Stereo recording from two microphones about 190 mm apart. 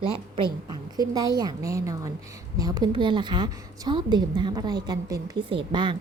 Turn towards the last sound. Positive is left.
turn(degrees=-25)  # may be behind; listen again after turning